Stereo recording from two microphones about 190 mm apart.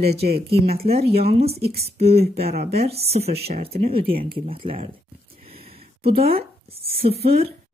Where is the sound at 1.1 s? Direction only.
55° right (ahead or behind).